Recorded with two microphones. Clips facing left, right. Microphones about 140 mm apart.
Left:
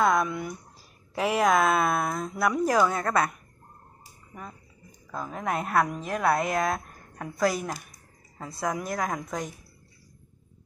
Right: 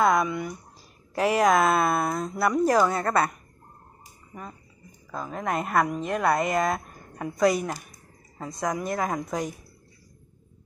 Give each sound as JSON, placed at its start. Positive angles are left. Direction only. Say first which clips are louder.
{"t": 0.0, "sound": "a woman's voice", "louder": "right 2 dB", "side_deg": 0}
{"t": 4.3, "sound": "a woman's voice", "louder": "right 2 dB", "side_deg": 0}